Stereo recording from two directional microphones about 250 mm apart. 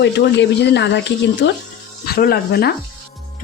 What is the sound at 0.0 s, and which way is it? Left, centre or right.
A woman's voice, left.